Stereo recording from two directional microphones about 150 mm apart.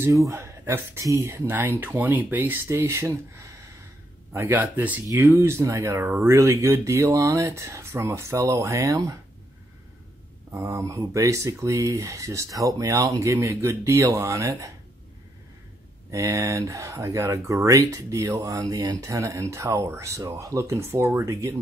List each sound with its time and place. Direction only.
0.3 s speech: 15° right (ahead or behind)
10.5 s speech: 20° right (ahead or behind)
16.1 s speech: 20° right (ahead or behind)